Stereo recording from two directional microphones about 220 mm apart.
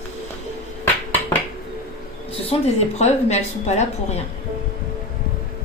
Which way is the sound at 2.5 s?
30° left (ahead or behind).